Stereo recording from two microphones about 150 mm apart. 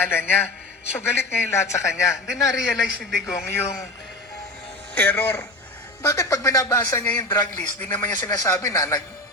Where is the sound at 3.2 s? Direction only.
20° left (ahead or behind).